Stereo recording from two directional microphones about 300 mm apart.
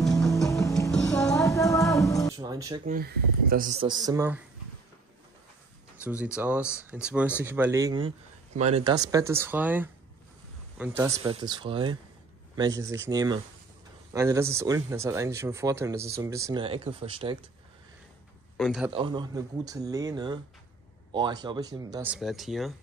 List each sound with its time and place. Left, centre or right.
0.0 s music: centre
2.3 s speech: centre
2.8 s speech: right
3.8 s speech: centre
6.0 s speech: centre
11.0 s speech: centre
18.6 s speech: centre
18.9 s speech: centre